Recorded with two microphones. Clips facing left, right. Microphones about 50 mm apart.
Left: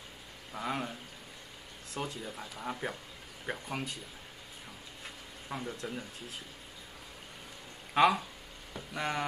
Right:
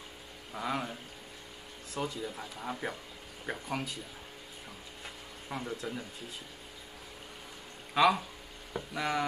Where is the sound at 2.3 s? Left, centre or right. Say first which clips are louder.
Even; centre.